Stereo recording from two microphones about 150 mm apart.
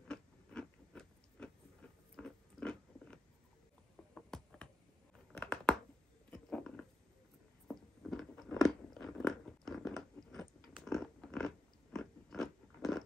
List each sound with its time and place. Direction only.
0.1 s biting: 5° left (ahead or behind)
4.1 s a sound: 5° left (ahead or behind)
8.5 s biting: centre (ahead or behind)